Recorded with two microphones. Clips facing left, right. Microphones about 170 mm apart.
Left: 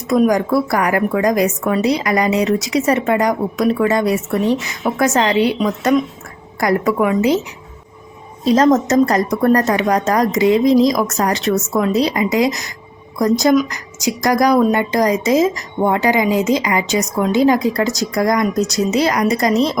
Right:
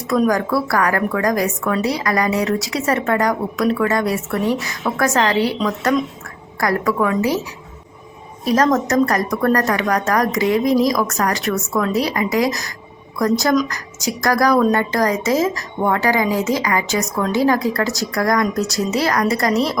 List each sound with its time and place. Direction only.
0.1 s a woman's voice: 20° left (ahead or behind)
8.4 s a woman's voice: 25° left (ahead or behind)